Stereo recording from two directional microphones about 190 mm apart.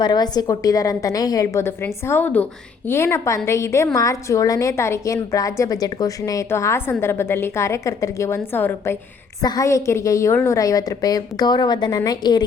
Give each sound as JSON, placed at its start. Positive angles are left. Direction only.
{"t": 0.0, "sound": "a woman's voice", "side_deg": 20}